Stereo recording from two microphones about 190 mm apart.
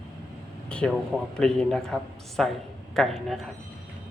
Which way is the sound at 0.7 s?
5° left (ahead or behind).